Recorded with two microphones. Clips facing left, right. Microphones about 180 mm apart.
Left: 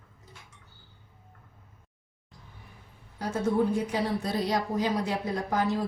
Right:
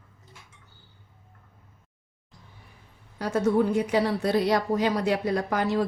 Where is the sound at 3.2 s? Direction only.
75° right (ahead or behind).